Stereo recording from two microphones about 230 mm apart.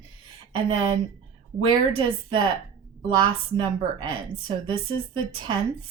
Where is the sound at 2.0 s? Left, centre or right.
Right.